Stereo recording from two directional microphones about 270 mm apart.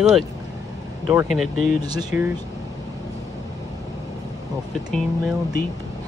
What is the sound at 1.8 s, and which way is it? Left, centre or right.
Speech, centre.